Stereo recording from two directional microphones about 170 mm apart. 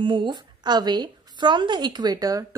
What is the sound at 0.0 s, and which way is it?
A woman's voice, 30° right (ahead or behind).